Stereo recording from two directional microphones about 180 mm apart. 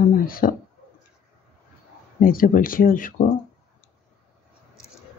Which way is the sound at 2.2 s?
50° left (ahead or behind).